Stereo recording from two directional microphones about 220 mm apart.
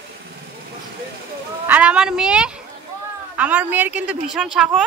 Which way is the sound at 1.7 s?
5° right (ahead or behind).